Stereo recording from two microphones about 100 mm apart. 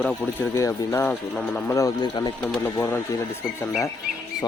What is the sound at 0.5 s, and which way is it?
Speech, 30° left (ahead or behind).